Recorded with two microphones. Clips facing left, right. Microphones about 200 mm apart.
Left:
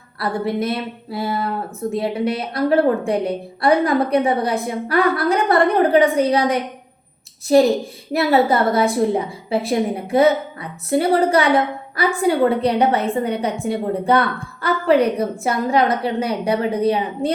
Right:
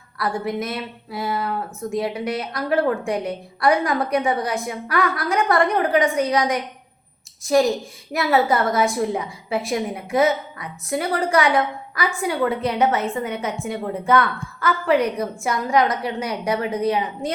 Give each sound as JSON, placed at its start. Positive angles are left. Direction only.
{"t": 0.2, "sound": "a woman's voice", "side_deg": 30}